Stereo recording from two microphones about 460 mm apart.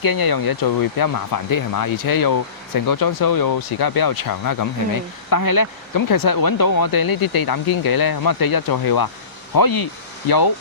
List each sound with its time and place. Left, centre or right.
0.0 s speech: left